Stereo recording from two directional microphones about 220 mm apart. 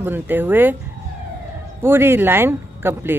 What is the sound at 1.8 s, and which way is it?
Speech, 10° right (ahead or behind).